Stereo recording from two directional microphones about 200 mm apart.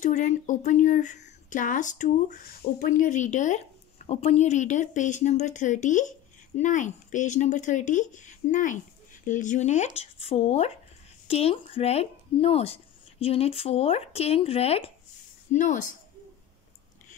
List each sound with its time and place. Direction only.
0.0 s speech: 40° left (ahead or behind)